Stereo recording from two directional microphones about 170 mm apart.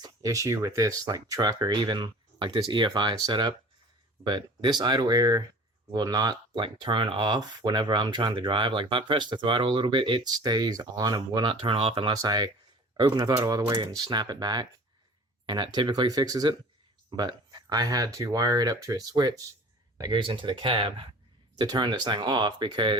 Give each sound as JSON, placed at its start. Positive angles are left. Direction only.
{"t": 0.0, "sound": "speech", "side_deg": -20}